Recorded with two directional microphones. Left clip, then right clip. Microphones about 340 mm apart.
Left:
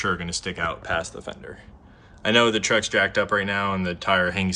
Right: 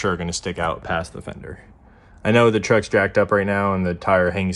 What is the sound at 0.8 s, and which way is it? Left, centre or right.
Speech, centre.